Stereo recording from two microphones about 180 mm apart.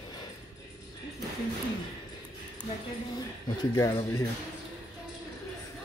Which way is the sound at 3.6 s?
20° left (ahead or behind).